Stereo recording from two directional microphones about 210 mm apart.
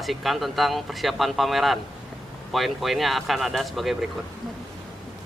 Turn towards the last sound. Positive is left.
turn(degrees=0)  # may be behind; listen again after turning